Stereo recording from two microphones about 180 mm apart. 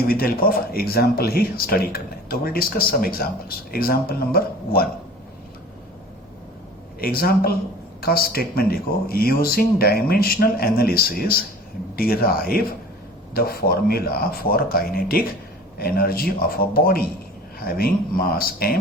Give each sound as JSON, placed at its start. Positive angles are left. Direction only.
{"t": 0.1, "sound": "speech", "side_deg": 55}
{"t": 7.0, "sound": "speech", "side_deg": 55}